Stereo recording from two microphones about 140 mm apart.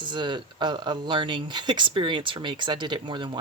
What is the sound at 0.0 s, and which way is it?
Speech, 35° right (ahead or behind).